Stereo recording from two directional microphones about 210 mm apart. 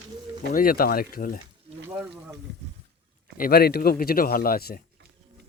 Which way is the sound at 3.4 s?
45° left (ahead or behind).